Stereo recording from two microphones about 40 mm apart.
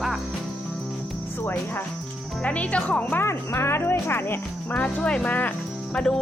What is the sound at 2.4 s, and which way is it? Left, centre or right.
Speech, left.